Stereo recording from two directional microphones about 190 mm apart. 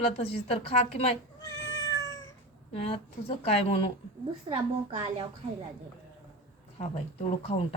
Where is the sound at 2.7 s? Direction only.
30° left (ahead or behind).